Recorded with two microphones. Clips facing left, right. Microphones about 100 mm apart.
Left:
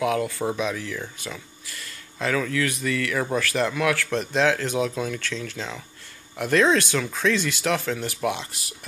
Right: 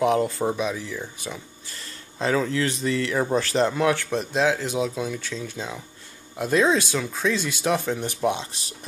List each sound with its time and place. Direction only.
0.0 s speech: 25° right (ahead or behind)
1.7 s speech: 30° right (ahead or behind)
4.4 s speech: 10° right (ahead or behind); by 8.7 s 25° right (ahead or behind)